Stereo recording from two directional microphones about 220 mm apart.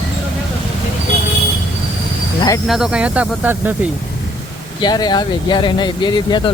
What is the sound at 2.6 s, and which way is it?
Speech, centre (ahead or behind).